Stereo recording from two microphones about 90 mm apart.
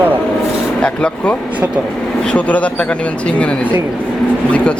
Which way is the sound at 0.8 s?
10° left (ahead or behind).